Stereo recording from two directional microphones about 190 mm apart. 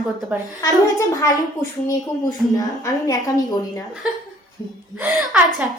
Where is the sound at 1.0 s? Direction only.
20° left (ahead or behind).